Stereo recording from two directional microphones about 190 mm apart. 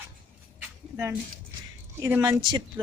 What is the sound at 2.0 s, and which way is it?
Speech, 15° right (ahead or behind).